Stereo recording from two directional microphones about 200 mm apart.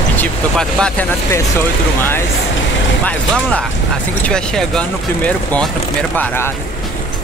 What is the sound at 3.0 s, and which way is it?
Speech, 5° left (ahead or behind).